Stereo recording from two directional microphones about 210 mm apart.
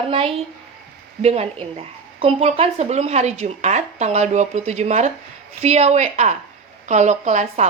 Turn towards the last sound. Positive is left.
turn(degrees=-35)  # may be behind; listen again after turning